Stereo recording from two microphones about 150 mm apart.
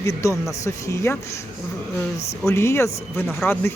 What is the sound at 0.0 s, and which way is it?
Speech, 20° left (ahead or behind).